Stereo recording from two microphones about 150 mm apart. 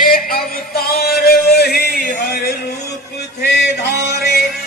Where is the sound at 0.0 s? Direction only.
75° left (ahead or behind); by 2.7 s 90° left.